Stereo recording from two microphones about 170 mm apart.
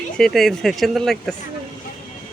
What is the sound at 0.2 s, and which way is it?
Speech, centre (ahead or behind).